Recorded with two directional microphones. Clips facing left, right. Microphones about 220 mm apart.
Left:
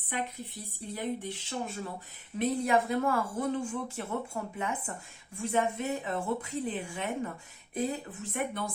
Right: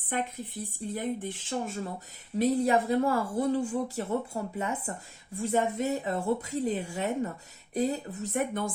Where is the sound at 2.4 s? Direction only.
35° right (ahead or behind).